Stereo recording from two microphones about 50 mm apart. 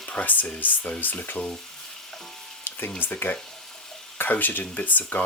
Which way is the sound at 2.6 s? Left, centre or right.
Left.